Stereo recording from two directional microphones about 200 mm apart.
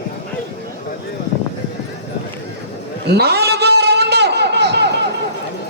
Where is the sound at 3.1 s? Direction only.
55° right (ahead or behind).